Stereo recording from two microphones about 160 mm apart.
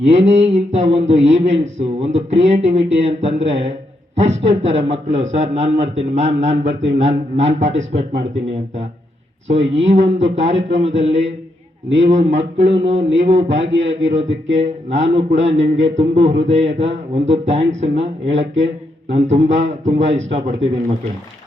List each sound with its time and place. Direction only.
0.0 s a man's voice: 40° right (ahead or behind)
9.5 s a man's voice: 45° right (ahead or behind)